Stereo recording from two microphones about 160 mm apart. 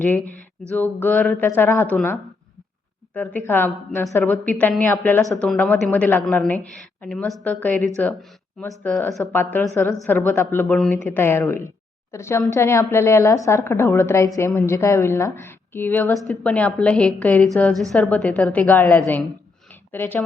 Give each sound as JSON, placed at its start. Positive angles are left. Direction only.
{"t": 0.8, "sound": "a woman's voice", "side_deg": 10}
{"t": 3.2, "sound": "a woman's voice", "side_deg": 10}